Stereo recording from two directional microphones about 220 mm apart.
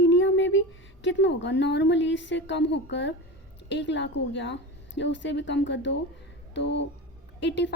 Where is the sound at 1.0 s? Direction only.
55° left (ahead or behind).